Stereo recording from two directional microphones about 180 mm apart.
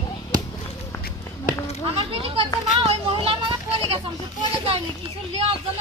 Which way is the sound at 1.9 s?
30° right (ahead or behind).